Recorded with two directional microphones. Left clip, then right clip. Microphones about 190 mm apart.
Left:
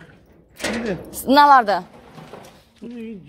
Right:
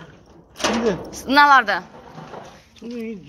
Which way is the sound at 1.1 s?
55° left (ahead or behind).